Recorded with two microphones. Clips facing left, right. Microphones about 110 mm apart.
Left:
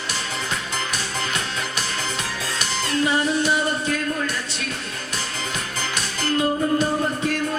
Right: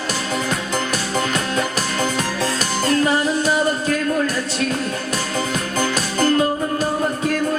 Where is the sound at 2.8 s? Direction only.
40° right (ahead or behind).